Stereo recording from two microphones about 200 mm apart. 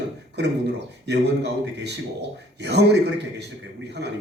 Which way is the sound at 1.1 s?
60° right (ahead or behind).